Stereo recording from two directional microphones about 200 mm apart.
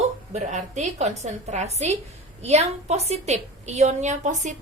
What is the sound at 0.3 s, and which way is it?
A woman's voice, 35° right (ahead or behind).